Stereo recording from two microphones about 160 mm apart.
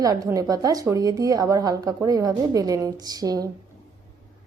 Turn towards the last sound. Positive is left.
turn(degrees=-25)  # may be behind; listen again after turning